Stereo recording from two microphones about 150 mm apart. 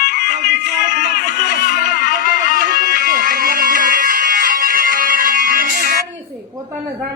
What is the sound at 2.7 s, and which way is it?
Music, 75° right (ahead or behind).